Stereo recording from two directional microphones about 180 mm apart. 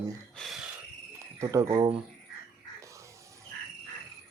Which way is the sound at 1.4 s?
15° right (ahead or behind).